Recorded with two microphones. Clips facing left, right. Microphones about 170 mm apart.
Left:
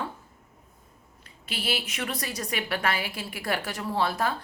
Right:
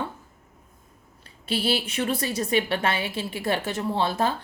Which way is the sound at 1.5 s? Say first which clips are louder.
Right 7 dB; 30° right (ahead or behind).